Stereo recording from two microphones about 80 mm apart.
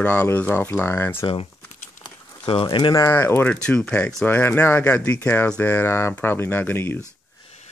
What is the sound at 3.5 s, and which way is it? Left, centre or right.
Speech, centre.